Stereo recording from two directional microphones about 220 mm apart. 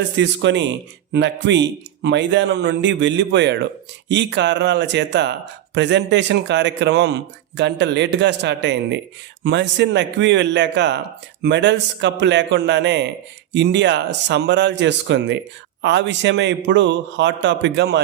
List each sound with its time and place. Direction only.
0.2 s speech: 55° right (ahead or behind)